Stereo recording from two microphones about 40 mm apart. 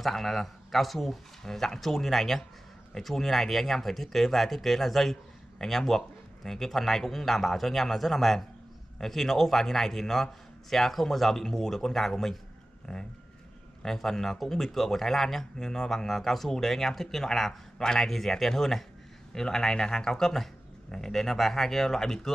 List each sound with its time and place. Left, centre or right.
0.0 s speech: centre